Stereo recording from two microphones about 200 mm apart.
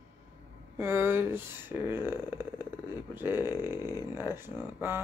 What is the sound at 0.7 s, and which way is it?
Speech, 10° right (ahead or behind).